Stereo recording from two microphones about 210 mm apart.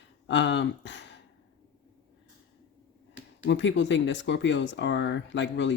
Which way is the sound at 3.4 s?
60° left (ahead or behind).